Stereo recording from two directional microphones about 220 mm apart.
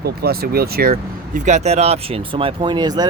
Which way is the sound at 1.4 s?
30° right (ahead or behind).